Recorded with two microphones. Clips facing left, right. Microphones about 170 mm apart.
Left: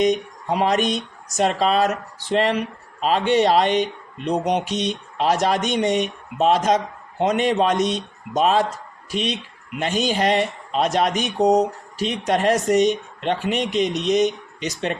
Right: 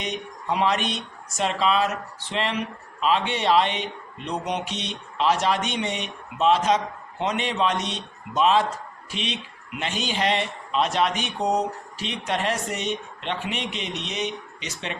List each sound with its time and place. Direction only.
0.0 s speech: 45° left (ahead or behind)